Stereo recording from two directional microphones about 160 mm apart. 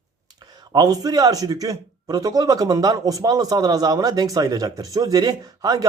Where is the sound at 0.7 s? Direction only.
25° right (ahead or behind).